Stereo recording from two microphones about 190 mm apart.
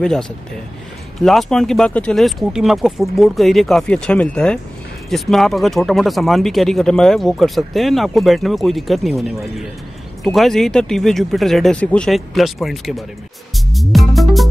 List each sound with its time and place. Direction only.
0.0 s speech: 5° left (ahead or behind)
13.7 s music: centre (ahead or behind)